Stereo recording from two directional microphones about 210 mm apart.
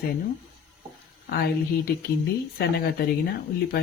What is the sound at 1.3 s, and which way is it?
Speech, 45° left (ahead or behind).